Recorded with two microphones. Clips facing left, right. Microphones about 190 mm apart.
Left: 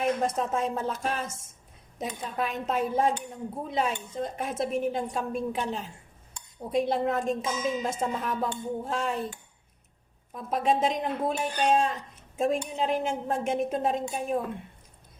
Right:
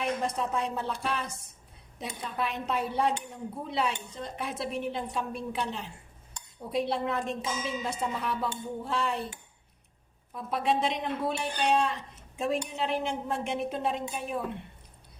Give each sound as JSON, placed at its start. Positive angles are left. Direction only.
{"t": 0.0, "sound": "speech", "side_deg": 45}
{"t": 10.3, "sound": "speech", "side_deg": 45}